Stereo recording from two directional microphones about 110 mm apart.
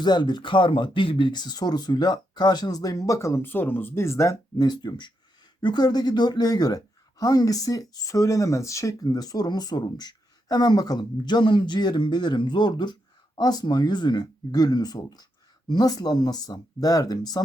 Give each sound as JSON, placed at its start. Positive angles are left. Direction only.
{"t": 0.0, "sound": "a woman's voice", "side_deg": 40}